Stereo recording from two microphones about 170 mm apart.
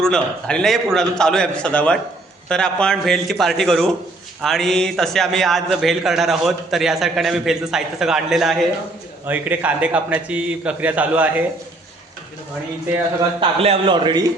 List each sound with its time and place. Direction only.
0.0 s a man's voice: 5° left (ahead or behind)
13.4 s a man's voice: 35° right (ahead or behind)